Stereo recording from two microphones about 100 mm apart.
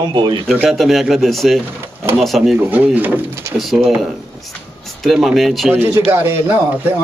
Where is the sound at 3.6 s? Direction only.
Centre (ahead or behind).